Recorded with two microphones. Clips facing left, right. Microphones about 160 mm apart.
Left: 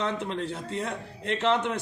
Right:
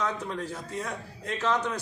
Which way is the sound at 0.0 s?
25° left (ahead or behind).